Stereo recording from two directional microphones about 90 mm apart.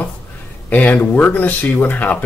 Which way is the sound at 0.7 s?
20° left (ahead or behind).